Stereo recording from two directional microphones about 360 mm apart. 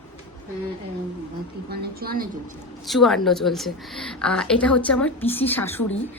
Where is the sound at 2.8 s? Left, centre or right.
Centre.